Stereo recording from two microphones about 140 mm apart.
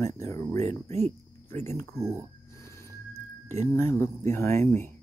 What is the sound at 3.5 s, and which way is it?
Speech, 20° left (ahead or behind).